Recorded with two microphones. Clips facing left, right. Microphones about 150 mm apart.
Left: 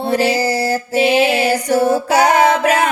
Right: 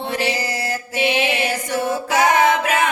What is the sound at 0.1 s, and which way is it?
Music, 35° left (ahead or behind).